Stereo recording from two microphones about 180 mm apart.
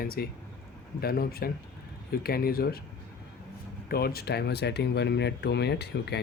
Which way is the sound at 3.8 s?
60° left (ahead or behind).